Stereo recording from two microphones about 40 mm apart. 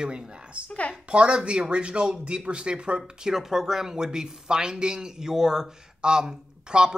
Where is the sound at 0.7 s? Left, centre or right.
Left.